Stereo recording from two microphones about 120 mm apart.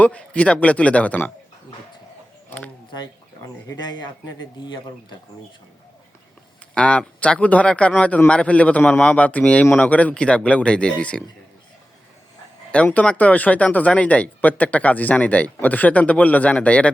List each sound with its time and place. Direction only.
0.0 s speech: 10° left (ahead or behind)
2.9 s speech: 35° left (ahead or behind)
6.7 s speech: 10° left (ahead or behind)
12.7 s speech: 10° left (ahead or behind)